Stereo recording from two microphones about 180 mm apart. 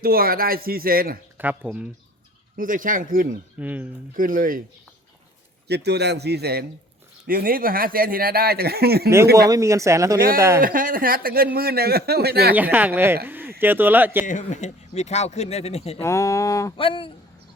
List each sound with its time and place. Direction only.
0.0 s speech: 55° right (ahead or behind)
1.4 s speech: 10° right (ahead or behind)
2.6 s speech: 50° right (ahead or behind)
3.6 s speech: 10° right (ahead or behind)
4.1 s speech: 50° right (ahead or behind)
5.6 s speech: 65° right (ahead or behind)
9.5 s speech: 15° right (ahead or behind)
10.6 s speech: 50° right (ahead or behind)
12.5 s speech: 10° right (ahead or behind)
13.2 s a sound: 10° right (ahead or behind)
13.6 s speech: 10° right (ahead or behind)
14.3 s speech: 40° left (ahead or behind)
16.0 s speech: 15° left (ahead or behind)
16.7 s speech: 30° left (ahead or behind)